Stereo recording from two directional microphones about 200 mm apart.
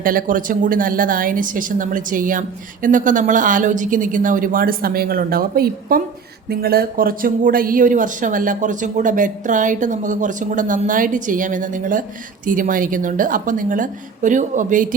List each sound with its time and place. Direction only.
0.0 s a woman's voice: 45° right (ahead or behind)